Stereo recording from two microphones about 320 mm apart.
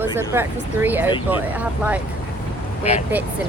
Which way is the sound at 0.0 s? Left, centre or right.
Centre.